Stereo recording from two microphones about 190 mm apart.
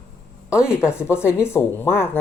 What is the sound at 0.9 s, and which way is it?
Speech, 15° left (ahead or behind).